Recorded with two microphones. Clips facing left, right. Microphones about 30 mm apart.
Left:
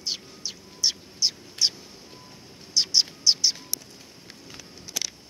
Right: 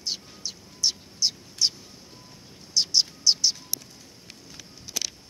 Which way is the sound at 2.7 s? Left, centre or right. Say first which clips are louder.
Left 1 dB; centre.